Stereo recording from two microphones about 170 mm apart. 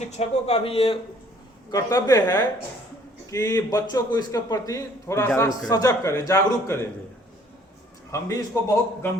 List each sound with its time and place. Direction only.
0.1 s speech: 40° left (ahead or behind)
1.7 s a man's voice: 20° left (ahead or behind)
8.1 s a man's voice: 20° left (ahead or behind)